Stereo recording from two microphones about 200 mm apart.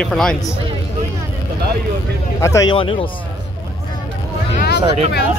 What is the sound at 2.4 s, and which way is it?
Speech, 15° left (ahead or behind).